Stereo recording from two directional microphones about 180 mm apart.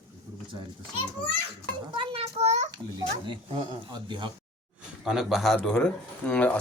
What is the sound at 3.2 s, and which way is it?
Speech, 25° right (ahead or behind).